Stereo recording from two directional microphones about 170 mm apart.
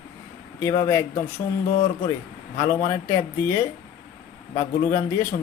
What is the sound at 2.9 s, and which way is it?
Speech, 15° left (ahead or behind).